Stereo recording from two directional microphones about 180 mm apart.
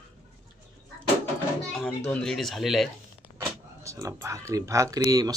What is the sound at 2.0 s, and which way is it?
Speech, 5° left (ahead or behind).